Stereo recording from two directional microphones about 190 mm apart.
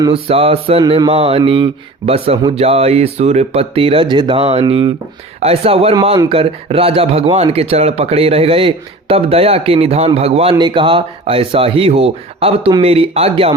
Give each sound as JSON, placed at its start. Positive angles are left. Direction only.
{"t": 0.0, "sound": "mantra", "side_deg": -30}
{"t": 5.4, "sound": "speech", "side_deg": -30}
{"t": 10.5, "sound": "mantra", "side_deg": -25}